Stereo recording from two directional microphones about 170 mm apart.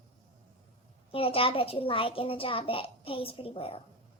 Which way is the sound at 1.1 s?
35° left (ahead or behind).